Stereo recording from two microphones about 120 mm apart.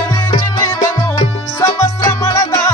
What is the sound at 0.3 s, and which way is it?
Music, 35° left (ahead or behind).